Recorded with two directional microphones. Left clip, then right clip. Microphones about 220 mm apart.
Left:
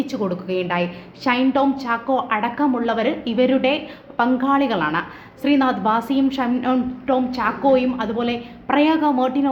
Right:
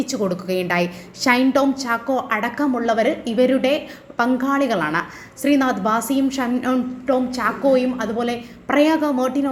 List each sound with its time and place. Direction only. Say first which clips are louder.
0.1 s a woman's voice: right 1 dB; 10° right (ahead or behind)